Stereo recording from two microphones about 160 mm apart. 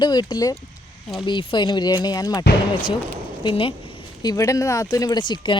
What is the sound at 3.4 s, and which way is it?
Speech, 35° left (ahead or behind).